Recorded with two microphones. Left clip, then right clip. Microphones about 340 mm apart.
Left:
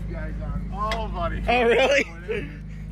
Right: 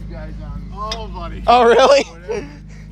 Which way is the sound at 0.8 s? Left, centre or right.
Centre.